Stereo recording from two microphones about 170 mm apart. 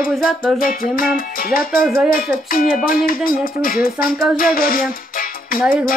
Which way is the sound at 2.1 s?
60° left (ahead or behind).